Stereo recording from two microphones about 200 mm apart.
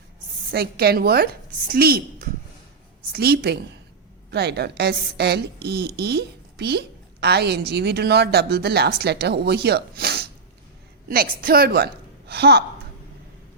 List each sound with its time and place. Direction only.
0.5 s a woman's voice: 50° right (ahead or behind)